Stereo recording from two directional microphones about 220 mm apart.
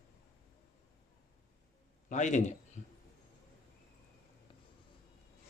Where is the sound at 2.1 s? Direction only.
35° left (ahead or behind).